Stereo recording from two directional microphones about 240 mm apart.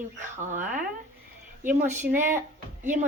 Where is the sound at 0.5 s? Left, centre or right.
Right.